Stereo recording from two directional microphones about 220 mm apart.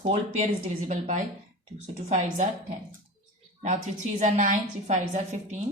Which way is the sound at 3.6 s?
35° right (ahead or behind).